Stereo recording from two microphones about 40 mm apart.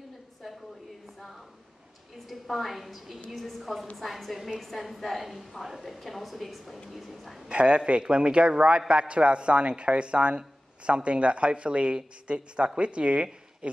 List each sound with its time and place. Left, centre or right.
2.1 s a woman's voice: centre
7.4 s a man's voice: right